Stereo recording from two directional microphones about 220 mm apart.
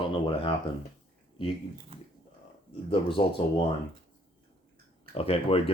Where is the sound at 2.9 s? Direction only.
25° left (ahead or behind).